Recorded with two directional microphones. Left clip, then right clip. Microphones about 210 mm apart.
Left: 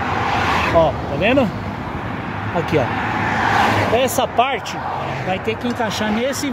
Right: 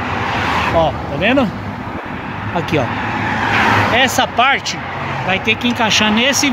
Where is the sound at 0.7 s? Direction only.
15° left (ahead or behind).